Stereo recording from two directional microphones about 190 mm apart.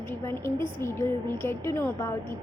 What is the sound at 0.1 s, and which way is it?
A woman's voice, 10° left (ahead or behind).